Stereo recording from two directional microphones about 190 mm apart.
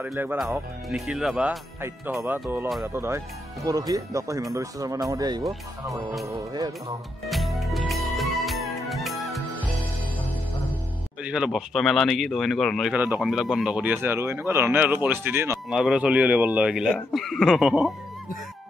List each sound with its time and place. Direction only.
0.0 s speech: 10° right (ahead or behind)
1.8 s speech: 10° right (ahead or behind)
7.2 s music: centre (ahead or behind)
11.2 s speech: 5° right (ahead or behind)